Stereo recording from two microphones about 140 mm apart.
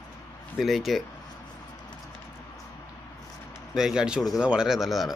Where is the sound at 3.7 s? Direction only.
5° right (ahead or behind).